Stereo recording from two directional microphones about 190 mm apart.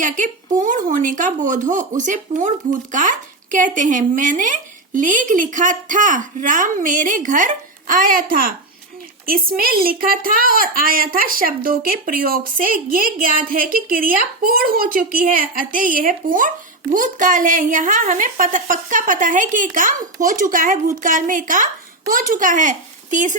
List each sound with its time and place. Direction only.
0.0 s a woman's voice: 40° right (ahead or behind)